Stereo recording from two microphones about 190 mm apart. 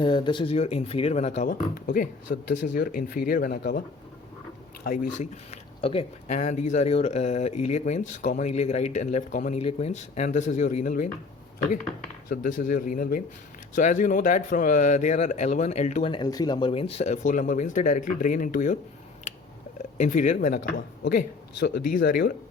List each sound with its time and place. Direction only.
0.0 s speech: 25° left (ahead or behind)
1.4 s speech: 45° left (ahead or behind)
5.1 s speech: 40° left (ahead or behind)
12.3 s speech: 45° left (ahead or behind)
20.0 s speech: 40° left (ahead or behind)